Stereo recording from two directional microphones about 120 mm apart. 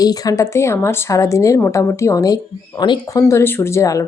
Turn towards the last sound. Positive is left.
turn(degrees=25)  # may be behind; listen again after turning